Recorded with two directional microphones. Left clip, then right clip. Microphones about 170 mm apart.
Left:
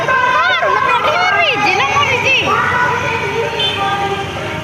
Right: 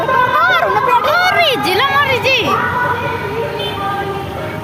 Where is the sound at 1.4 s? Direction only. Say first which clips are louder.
Left 1 dB; 90° right.